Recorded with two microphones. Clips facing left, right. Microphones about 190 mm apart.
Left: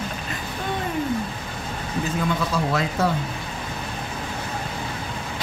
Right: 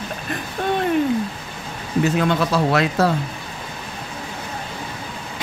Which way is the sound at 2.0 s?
70° right (ahead or behind).